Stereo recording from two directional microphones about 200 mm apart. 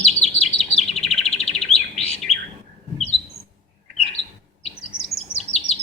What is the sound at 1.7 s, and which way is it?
Chirp, 30° left (ahead or behind).